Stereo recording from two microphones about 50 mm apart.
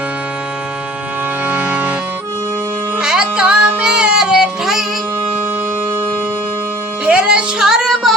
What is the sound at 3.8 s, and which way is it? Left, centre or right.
Child singing, centre.